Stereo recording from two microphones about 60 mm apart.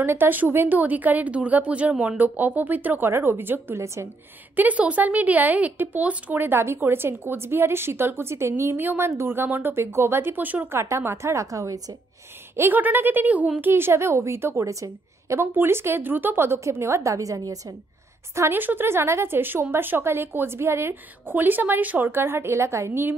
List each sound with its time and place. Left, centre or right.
0.0 s a woman's voice: right
3.7 s a woman's voice: right
4.6 s a woman's voice: right
8.7 s a woman's voice: right
10.7 s a woman's voice: right
12.5 s a woman's voice: right
13.6 s a woman's voice: right
15.4 s a woman's voice: right
16.5 s a woman's voice: right
18.5 s a woman's voice: right